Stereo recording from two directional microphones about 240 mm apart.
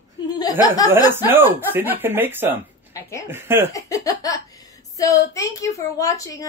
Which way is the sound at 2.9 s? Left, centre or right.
Centre.